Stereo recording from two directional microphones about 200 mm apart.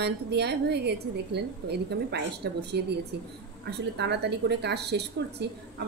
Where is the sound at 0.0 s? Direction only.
55° right (ahead or behind).